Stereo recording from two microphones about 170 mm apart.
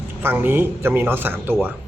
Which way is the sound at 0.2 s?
10° right (ahead or behind).